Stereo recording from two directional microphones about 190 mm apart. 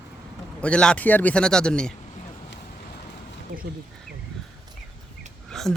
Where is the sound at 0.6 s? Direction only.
5° left (ahead or behind).